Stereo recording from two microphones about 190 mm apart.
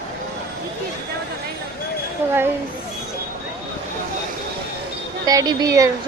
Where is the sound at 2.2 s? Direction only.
10° right (ahead or behind).